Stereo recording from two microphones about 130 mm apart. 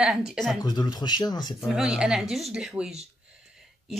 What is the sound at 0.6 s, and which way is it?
Speech, 30° left (ahead or behind).